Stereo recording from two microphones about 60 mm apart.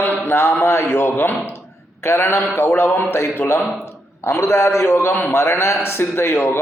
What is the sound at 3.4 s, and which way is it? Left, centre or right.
Speech, centre.